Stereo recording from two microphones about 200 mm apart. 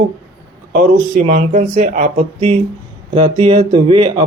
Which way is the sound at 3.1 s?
30° right (ahead or behind).